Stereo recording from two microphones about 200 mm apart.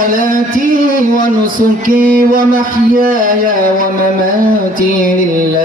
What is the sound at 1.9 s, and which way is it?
Mantra, 45° right (ahead or behind).